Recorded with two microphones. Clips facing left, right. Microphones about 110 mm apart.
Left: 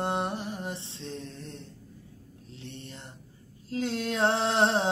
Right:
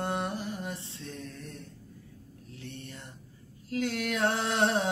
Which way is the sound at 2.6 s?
25° left (ahead or behind).